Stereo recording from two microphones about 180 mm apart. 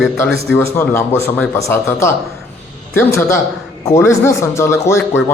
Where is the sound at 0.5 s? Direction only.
15° left (ahead or behind).